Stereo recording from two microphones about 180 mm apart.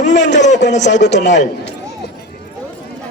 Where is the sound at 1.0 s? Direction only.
75° left (ahead or behind).